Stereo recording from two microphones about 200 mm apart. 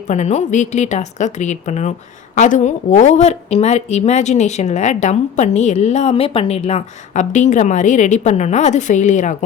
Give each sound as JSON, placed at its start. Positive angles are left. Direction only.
{"t": 0.1, "sound": "a woman's voice", "side_deg": 35}